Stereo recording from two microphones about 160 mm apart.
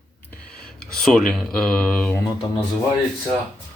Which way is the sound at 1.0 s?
5° left (ahead or behind).